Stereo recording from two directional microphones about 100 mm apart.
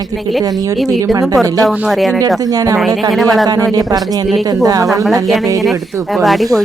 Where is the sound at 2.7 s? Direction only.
Centre (ahead or behind).